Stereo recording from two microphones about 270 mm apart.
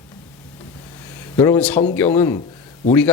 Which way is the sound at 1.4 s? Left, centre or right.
Centre.